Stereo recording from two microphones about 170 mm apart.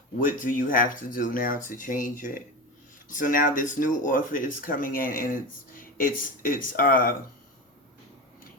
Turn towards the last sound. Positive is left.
turn(degrees=55)  # may be behind; listen again after turning